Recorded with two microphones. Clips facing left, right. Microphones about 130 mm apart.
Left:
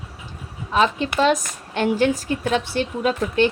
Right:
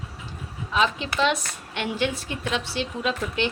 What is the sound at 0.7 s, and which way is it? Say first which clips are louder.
A woman's voice: left 4 dB; 45° left (ahead or behind).